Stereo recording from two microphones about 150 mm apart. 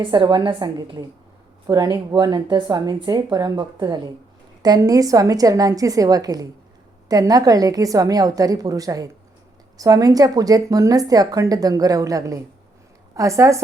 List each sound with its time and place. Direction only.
0.0 s a woman's voice: 35° right (ahead or behind)